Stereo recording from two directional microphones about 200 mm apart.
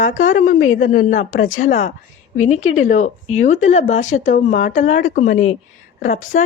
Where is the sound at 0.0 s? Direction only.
40° left (ahead or behind).